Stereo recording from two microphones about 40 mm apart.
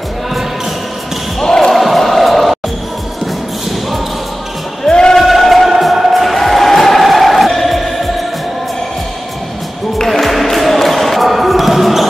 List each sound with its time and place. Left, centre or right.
1.4 s basketball bounce: centre
1.8 s music: centre
4.8 s music: centre
5.1 s music: centre
9.9 s music: centre